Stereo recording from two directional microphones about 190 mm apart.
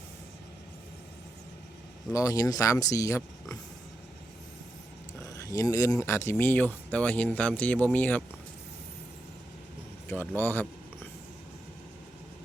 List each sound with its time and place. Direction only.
2.1 s speech: 20° left (ahead or behind)
5.2 s speech: 15° left (ahead or behind)
10.1 s speech: 10° left (ahead or behind)